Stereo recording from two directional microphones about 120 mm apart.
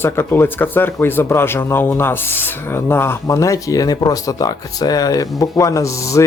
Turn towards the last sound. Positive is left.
turn(degrees=25)  # may be behind; listen again after turning